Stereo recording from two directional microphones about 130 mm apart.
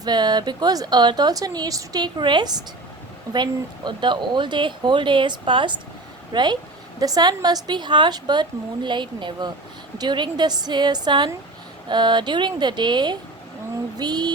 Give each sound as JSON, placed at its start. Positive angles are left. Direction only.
{"t": 0.0, "sound": "a woman's voice", "side_deg": -30}